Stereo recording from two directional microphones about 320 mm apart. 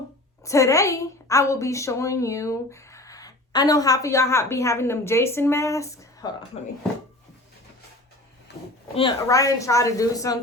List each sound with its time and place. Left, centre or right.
0.4 s a woman's voice: centre
9.0 s a woman's voice: centre